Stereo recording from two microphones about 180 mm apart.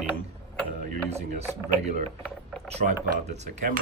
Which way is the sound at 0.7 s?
45° right (ahead or behind).